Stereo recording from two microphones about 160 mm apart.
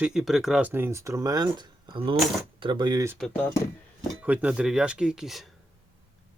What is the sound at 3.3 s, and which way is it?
Speech, 15° left (ahead or behind).